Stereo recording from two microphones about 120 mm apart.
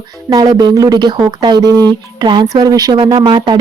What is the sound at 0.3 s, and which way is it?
Speech, 30° right (ahead or behind).